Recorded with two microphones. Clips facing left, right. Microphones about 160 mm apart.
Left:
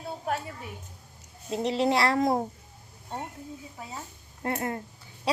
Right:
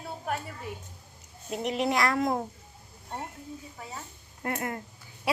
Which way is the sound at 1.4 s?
30° left (ahead or behind).